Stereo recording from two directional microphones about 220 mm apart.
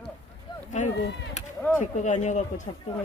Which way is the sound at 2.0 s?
35° left (ahead or behind).